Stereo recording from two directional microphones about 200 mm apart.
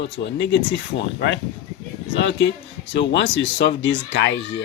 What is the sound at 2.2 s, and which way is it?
Speech, 65° left (ahead or behind).